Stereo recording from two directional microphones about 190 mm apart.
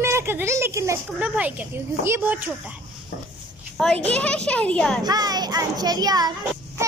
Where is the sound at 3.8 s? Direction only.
5° left (ahead or behind).